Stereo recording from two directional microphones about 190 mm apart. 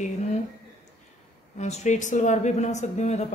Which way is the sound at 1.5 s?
35° left (ahead or behind).